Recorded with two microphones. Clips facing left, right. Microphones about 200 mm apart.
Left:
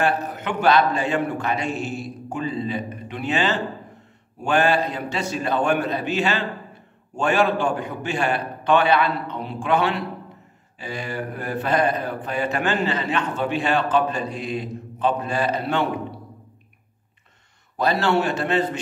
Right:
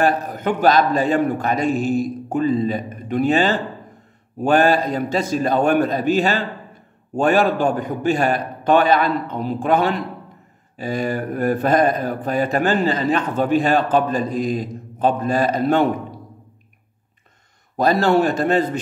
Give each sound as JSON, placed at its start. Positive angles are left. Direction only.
{"t": 0.0, "sound": "a man's voice", "side_deg": -40}
{"t": 17.7, "sound": "speech", "side_deg": -40}